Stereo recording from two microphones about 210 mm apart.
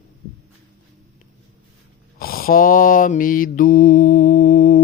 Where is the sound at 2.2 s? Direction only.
45° left (ahead or behind).